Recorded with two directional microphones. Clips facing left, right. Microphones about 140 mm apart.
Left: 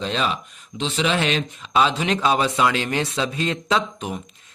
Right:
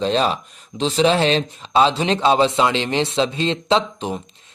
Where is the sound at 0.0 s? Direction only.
35° right (ahead or behind).